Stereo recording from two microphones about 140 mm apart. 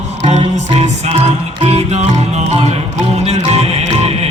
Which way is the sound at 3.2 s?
50° right (ahead or behind).